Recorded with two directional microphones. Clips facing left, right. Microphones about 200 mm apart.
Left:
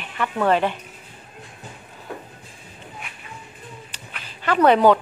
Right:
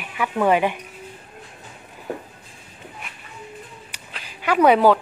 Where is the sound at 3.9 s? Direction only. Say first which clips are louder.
Even; 10° right (ahead or behind).